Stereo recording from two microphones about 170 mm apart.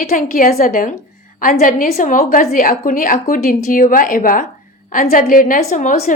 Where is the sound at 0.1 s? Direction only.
50° left (ahead or behind).